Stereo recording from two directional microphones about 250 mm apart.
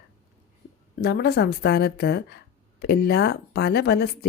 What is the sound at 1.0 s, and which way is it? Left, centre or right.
Speech, left.